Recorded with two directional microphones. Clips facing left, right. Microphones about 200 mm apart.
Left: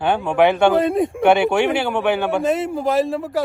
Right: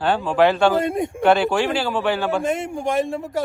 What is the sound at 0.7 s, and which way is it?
Speech, centre (ahead or behind).